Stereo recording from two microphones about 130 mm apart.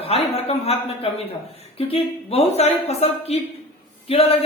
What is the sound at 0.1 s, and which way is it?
A woman's voice, 50° left (ahead or behind).